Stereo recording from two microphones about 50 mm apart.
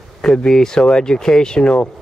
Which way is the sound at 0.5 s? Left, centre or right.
Centre.